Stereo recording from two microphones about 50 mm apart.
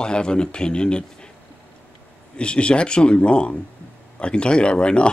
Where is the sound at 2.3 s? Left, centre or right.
Left.